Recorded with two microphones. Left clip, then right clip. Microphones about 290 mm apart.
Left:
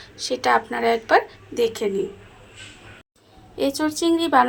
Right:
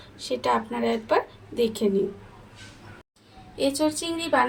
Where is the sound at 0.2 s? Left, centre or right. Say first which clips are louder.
Left 5 dB; left.